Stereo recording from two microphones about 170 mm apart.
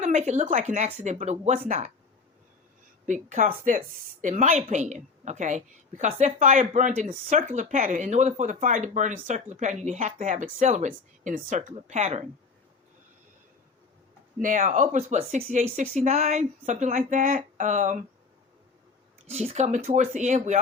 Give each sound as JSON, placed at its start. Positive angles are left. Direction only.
{"t": 0.0, "sound": "speech", "side_deg": -45}
{"t": 3.1, "sound": "speech", "side_deg": -50}
{"t": 14.4, "sound": "speech", "side_deg": -50}
{"t": 19.3, "sound": "speech", "side_deg": -40}